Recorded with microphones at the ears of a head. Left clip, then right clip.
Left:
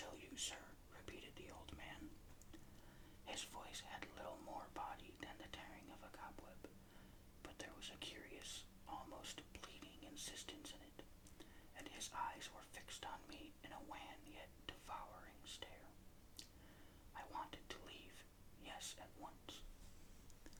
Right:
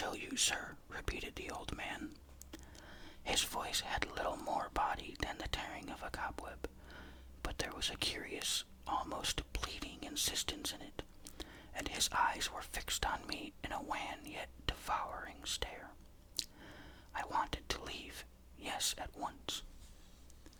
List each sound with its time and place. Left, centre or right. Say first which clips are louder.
0.0 s speech: right 14 dB; right